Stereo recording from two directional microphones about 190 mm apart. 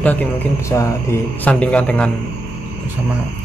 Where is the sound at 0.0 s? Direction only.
10° left (ahead or behind).